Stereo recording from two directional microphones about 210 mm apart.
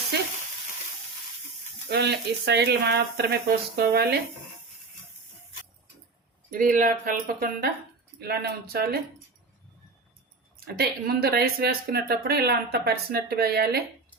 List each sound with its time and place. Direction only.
1.9 s speech: 55° right (ahead or behind)
6.5 s speech: 40° right (ahead or behind)
10.8 s speech: 45° right (ahead or behind)